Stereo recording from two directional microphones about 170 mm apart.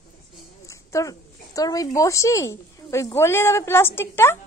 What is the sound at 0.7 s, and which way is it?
Speech, 20° left (ahead or behind).